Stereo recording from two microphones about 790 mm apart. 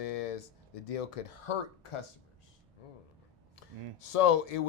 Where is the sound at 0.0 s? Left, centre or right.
Left.